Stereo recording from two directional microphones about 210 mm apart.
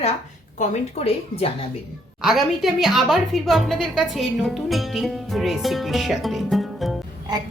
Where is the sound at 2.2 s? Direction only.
Centre (ahead or behind).